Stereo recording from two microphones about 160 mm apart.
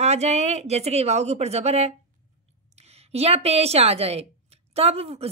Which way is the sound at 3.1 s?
40° right (ahead or behind).